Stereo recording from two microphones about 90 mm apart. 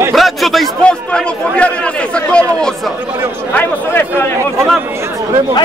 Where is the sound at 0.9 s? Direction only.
10° left (ahead or behind).